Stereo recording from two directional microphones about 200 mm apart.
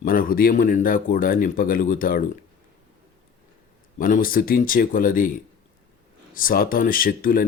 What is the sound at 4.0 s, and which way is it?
Speech, 45° left (ahead or behind).